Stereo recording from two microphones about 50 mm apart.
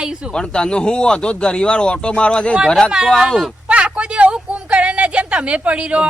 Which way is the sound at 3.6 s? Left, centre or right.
Right.